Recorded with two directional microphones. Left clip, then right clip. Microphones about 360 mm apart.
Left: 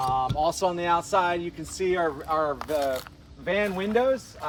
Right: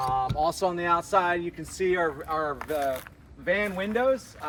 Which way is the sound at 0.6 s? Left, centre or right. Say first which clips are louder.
Left 1 dB; centre.